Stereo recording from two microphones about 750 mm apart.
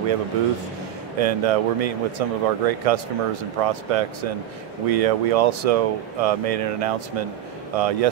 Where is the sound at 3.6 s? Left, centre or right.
Right.